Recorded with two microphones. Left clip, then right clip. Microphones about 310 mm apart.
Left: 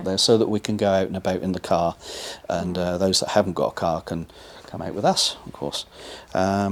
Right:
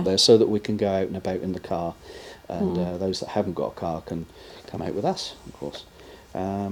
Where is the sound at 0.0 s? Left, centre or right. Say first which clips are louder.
Right 2 dB; centre.